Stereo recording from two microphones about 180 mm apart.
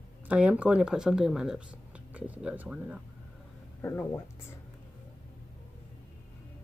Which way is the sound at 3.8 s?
15° left (ahead or behind).